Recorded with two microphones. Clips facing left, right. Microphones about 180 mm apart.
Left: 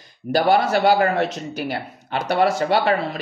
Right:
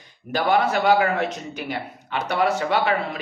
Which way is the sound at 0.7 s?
40° left (ahead or behind).